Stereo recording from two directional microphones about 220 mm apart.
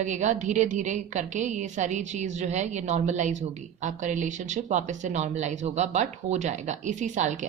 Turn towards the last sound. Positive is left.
turn(degrees=-35)  # may be behind; listen again after turning